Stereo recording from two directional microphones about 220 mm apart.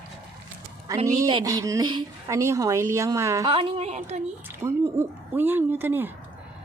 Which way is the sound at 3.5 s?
30° right (ahead or behind).